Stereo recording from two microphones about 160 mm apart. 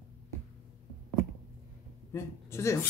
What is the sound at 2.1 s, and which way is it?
Speech, 15° left (ahead or behind).